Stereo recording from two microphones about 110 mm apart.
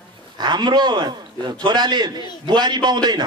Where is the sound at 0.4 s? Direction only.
40° right (ahead or behind).